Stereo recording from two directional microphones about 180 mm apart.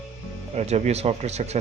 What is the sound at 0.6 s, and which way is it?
A man's voice, 40° right (ahead or behind).